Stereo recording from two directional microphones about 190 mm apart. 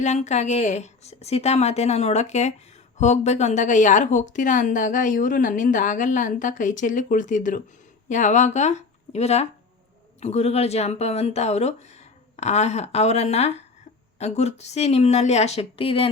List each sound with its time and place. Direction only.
0.0 s a woman's voice: 35° left (ahead or behind)